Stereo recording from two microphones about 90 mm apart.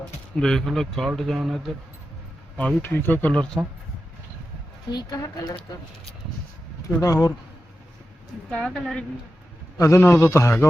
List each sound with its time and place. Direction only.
0.3 s speech: 5° left (ahead or behind)
2.8 s speech: 20° left (ahead or behind)
4.9 s a woman's voice: 50° left (ahead or behind)
6.8 s a man's voice: 40° left (ahead or behind)
8.5 s a woman's voice: 10° left (ahead or behind)
9.7 s a man's voice: 40° left (ahead or behind)